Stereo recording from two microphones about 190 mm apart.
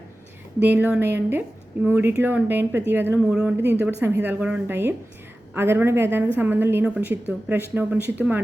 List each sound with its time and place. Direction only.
0.6 s a woman's voice: 10° right (ahead or behind)